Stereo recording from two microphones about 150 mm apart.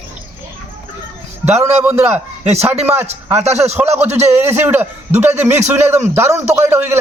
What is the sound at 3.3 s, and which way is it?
Speech, 45° right (ahead or behind).